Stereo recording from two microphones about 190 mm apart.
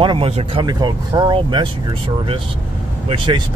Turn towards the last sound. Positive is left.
turn(degrees=-25)  # may be behind; listen again after turning